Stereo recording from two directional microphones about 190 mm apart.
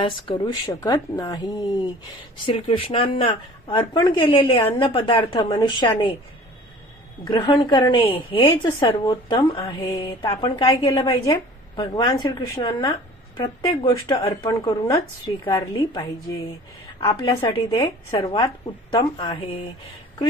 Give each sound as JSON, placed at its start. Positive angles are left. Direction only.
{"t": 0.0, "sound": "a woman's voice", "side_deg": 25}
{"t": 7.2, "sound": "a woman's voice", "side_deg": 25}